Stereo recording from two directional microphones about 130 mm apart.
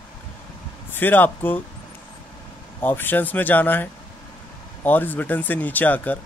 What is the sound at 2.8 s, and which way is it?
Speech, 15° left (ahead or behind).